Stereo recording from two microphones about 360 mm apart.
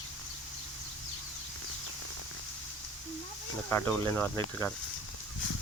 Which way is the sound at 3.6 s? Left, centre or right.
Centre.